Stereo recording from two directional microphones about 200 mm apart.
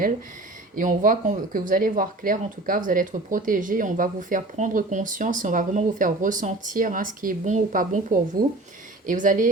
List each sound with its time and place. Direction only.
0.8 s speech: 40° right (ahead or behind)